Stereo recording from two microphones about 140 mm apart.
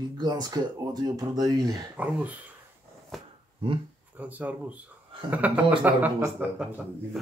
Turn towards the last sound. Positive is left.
turn(degrees=-10)  # may be behind; listen again after turning